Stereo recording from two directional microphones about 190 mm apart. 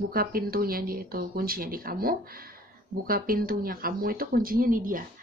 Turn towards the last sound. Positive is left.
turn(degrees=-45)  # may be behind; listen again after turning